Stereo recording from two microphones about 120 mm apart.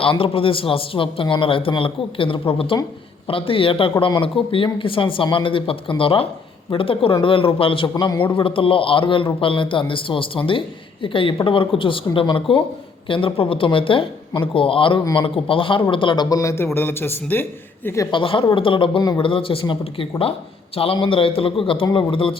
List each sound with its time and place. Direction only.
0.0 s a man's voice: 50° left (ahead or behind); by 18.1 s 25° left (ahead or behind)
18.1 s a man's voice: 45° left (ahead or behind)